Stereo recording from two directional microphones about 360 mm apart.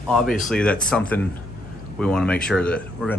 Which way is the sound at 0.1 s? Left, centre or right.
Centre.